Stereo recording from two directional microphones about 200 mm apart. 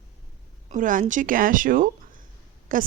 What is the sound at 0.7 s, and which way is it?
A woman's voice, 40° right (ahead or behind).